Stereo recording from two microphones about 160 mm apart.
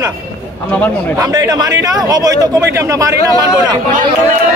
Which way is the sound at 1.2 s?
25° right (ahead or behind).